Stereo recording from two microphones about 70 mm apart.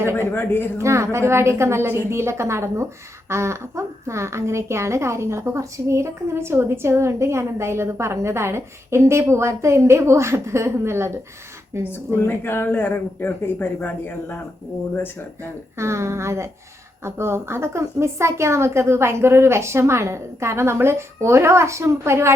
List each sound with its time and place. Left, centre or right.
0.0 s a sound: right
0.3 s speech: left
0.8 s a woman's voice: right
11.9 s speech: left
15.8 s a woman's voice: right